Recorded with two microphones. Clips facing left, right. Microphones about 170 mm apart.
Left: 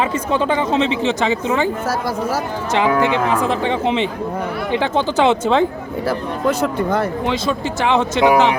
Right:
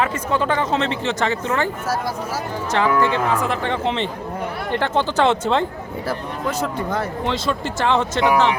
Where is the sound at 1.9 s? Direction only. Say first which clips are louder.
Left 4 dB; 75° left (ahead or behind).